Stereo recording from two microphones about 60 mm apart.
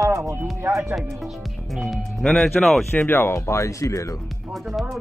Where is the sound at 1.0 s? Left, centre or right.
Centre.